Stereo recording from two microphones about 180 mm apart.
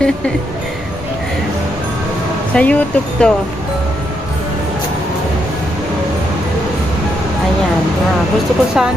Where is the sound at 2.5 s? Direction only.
10° left (ahead or behind).